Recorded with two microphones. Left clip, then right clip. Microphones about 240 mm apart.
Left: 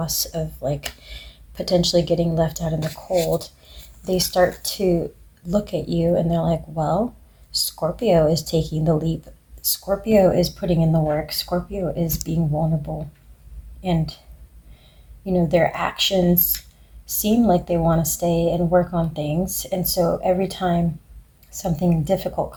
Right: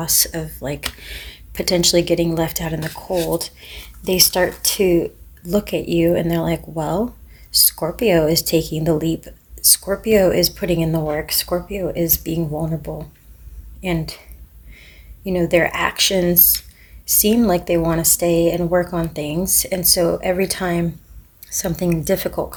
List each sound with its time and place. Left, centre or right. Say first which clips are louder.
0.0 s speech: right 4 dB; right
4.0 s speech: right 2 dB; right
12.9 s speech: right 2 dB; right
13.8 s speech: right 2 dB; right
15.2 s speech: right 2 dB; right